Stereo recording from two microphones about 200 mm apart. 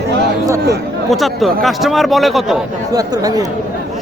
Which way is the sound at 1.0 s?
Centre (ahead or behind).